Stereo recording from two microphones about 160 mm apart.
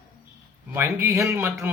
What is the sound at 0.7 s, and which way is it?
Speech, 15° right (ahead or behind).